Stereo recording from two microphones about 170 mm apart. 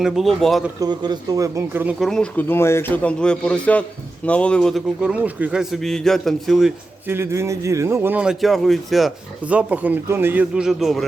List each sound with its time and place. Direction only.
0.0 s a man's voice: centre (ahead or behind)
0.8 s speech: 25° right (ahead or behind)
2.0 s a man's voice: 5° left (ahead or behind)
7.1 s a man's voice: 15° right (ahead or behind)